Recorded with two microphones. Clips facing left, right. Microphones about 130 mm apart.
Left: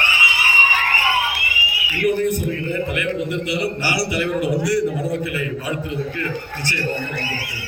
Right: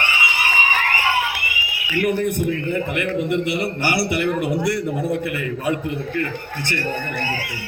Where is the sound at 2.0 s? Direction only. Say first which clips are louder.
Left 1 dB; 55° right (ahead or behind).